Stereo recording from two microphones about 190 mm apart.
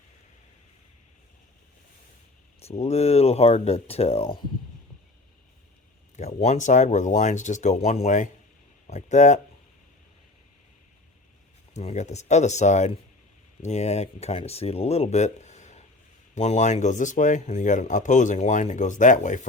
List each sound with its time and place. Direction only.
2.6 s speech: 35° left (ahead or behind)
6.1 s speech: 35° left (ahead or behind)
11.7 s speech: 35° left (ahead or behind)